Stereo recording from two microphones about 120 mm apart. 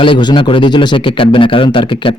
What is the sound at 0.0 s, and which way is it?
Speech, 40° left (ahead or behind).